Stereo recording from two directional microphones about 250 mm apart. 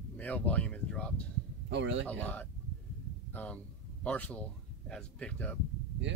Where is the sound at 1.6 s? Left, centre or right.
Right.